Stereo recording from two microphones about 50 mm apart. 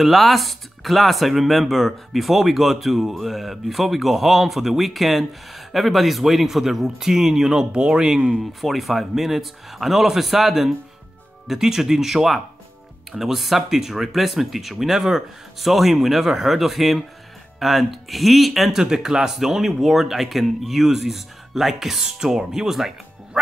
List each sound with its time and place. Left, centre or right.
0.0 s speech: centre
8.4 s speech: centre
23.3 s quack: centre